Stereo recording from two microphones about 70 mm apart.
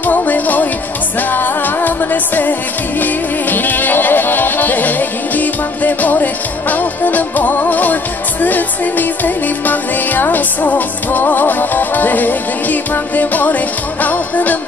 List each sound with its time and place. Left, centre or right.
0.0 s music: left